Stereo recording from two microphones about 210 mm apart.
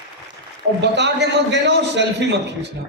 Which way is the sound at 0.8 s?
55° right (ahead or behind).